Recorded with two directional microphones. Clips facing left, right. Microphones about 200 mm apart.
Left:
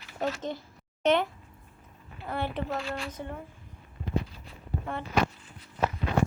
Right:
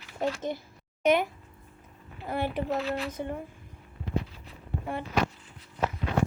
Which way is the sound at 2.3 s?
10° right (ahead or behind).